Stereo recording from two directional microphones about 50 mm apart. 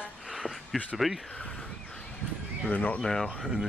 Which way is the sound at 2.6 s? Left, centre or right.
Left.